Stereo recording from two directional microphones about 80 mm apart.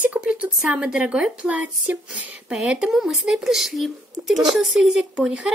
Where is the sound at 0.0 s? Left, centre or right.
Centre.